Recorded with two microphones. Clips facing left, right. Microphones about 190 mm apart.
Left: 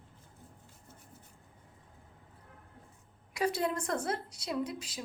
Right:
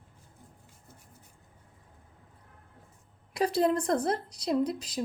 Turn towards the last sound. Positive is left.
turn(degrees=-40)  # may be behind; listen again after turning